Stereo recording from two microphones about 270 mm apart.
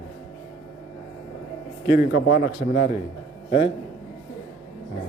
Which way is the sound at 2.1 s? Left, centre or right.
Left.